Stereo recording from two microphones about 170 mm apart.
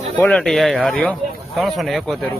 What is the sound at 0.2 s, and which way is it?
Speech, 5° left (ahead or behind).